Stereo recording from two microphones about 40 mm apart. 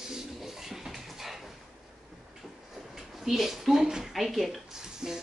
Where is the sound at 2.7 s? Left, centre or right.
Centre.